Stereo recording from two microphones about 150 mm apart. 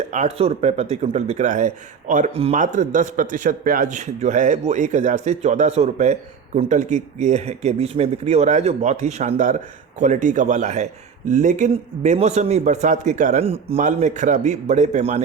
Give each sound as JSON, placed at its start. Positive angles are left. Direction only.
{"t": 0.1, "sound": "a man's voice", "side_deg": -50}
{"t": 2.3, "sound": "speech", "side_deg": -40}
{"t": 2.6, "sound": "a man's voice", "side_deg": -55}
{"t": 13.4, "sound": "a man's voice", "side_deg": -40}